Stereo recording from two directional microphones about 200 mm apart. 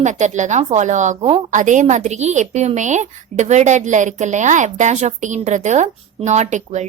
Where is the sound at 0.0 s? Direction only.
35° right (ahead or behind).